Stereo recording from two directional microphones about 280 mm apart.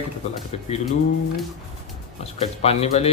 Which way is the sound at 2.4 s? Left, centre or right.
Left.